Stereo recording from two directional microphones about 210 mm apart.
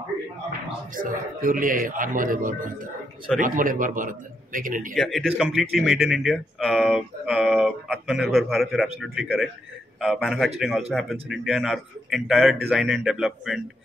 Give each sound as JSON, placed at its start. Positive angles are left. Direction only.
{"t": 0.9, "sound": "speech", "side_deg": -40}
{"t": 4.9, "sound": "a man's voice", "side_deg": 0}